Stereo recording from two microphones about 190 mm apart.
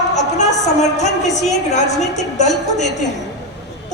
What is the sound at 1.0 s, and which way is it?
A woman's voice, 35° left (ahead or behind).